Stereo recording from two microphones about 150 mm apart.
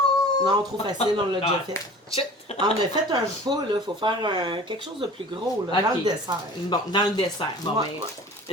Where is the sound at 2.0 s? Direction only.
40° left (ahead or behind).